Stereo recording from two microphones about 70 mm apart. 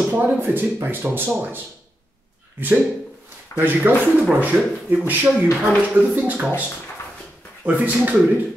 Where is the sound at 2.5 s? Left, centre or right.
Right.